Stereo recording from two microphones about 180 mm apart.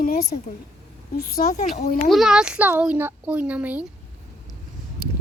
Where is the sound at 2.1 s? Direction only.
5° right (ahead or behind).